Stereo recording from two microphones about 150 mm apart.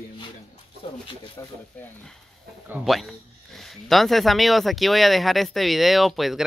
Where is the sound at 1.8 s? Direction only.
10° left (ahead or behind).